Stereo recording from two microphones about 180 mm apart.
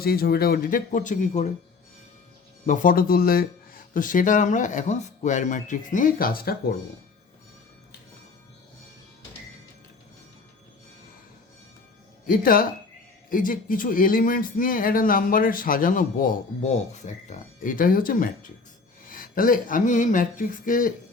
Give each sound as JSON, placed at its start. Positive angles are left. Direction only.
{"t": 0.0, "sound": "speech", "side_deg": 60}
{"t": 2.6, "sound": "speech", "side_deg": 45}
{"t": 12.3, "sound": "speech", "side_deg": 50}